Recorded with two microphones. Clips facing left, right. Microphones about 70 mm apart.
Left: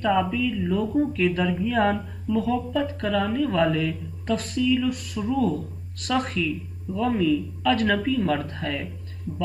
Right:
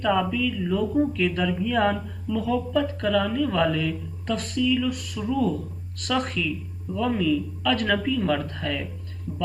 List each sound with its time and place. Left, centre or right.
0.0 s speech: centre
5.3 s speech: left
6.9 s speech: centre